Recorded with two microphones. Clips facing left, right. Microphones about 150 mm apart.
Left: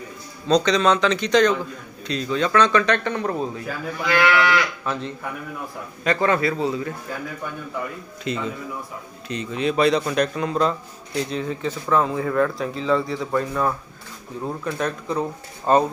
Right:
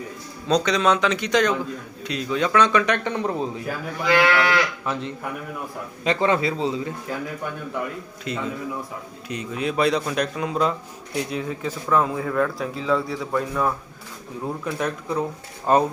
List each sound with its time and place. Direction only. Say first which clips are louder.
0.4 s speech: left 2 dB; 5° right (ahead or behind)
4.2 s a man's voice: left 2 dB; 30° right (ahead or behind)
4.9 s a man's voice: even; 15° right (ahead or behind)
8.2 s speech: left 1 dB; 5° right (ahead or behind)